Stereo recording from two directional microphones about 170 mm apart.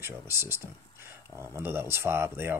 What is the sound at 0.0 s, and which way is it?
Speech, 15° right (ahead or behind).